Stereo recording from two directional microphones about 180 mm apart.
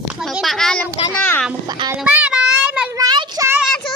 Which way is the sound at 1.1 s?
10° left (ahead or behind).